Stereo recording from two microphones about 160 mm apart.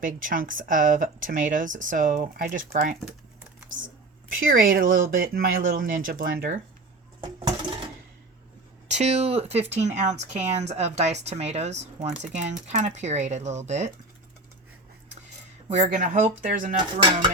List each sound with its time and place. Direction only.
0.0 s speech: 55° right (ahead or behind)
4.4 s speech: 60° right (ahead or behind)
7.2 s a sound: 25° right (ahead or behind)
8.9 s speech: 45° right (ahead or behind)
15.7 s speech: 50° right (ahead or behind)